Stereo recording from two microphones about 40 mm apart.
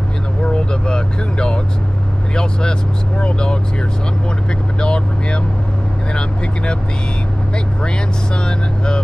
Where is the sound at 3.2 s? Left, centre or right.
Left.